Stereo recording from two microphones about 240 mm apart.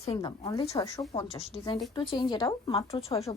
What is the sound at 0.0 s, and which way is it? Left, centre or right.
Speech, left.